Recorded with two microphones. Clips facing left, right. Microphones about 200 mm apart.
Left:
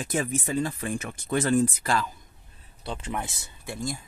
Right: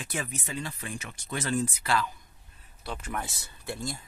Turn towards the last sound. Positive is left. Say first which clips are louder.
# left 3 dB
turn(degrees=15)  # may be behind; listen again after turning